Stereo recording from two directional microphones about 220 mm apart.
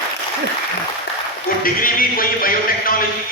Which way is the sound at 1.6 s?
40° left (ahead or behind).